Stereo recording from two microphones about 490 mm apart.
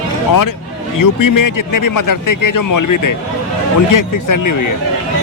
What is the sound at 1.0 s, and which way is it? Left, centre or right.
Speech, left.